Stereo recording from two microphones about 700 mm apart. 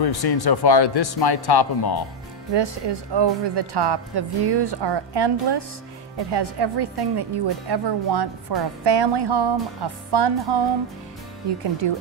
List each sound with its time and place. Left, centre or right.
0.0 s speech: left
2.5 s a woman's voice: right